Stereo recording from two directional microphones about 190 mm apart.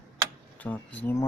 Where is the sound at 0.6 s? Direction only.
10° left (ahead or behind).